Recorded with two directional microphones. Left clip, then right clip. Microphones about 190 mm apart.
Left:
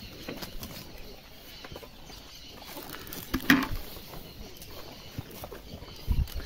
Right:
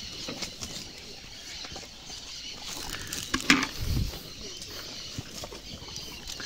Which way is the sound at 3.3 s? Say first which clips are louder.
Right 1 dB; 45° left (ahead or behind).